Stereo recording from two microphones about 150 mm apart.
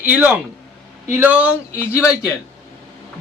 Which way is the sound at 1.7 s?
15° left (ahead or behind).